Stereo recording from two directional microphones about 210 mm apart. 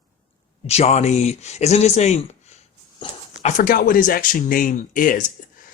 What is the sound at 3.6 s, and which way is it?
Speech, 40° left (ahead or behind).